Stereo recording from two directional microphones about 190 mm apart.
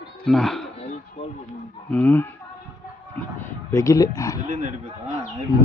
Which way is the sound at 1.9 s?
10° left (ahead or behind).